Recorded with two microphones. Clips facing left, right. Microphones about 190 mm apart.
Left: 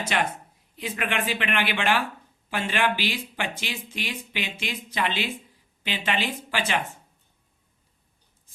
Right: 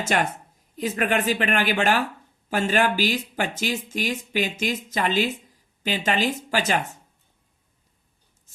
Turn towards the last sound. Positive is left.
turn(degrees=-40)  # may be behind; listen again after turning